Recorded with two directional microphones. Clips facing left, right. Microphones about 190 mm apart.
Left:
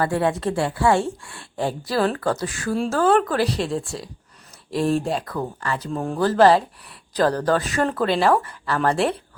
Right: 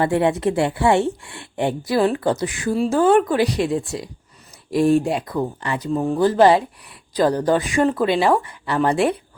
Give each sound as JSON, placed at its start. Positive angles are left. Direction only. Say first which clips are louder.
{"t": 0.0, "sound": "a woman's voice", "louder": "right 3 dB", "side_deg": -20}
{"t": 2.7, "sound": "speech", "louder": "right 3 dB", "side_deg": -5}
{"t": 3.0, "sound": "speech", "louder": "right 3 dB", "side_deg": -15}
{"t": 4.8, "sound": "speech", "louder": "right 5 dB", "side_deg": 0}
{"t": 5.0, "sound": "speech", "louder": "right 3 dB", "side_deg": -15}
{"t": 5.9, "sound": "speech", "louder": "right 8 dB", "side_deg": 0}
{"t": 6.1, "sound": "speech", "louder": "right 1 dB", "side_deg": -15}